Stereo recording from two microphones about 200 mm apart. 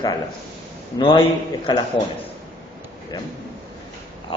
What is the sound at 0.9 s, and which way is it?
Speech, 25° left (ahead or behind).